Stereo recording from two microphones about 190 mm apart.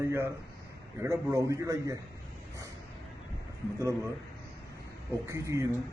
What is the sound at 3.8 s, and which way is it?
A man's voice, 15° right (ahead or behind).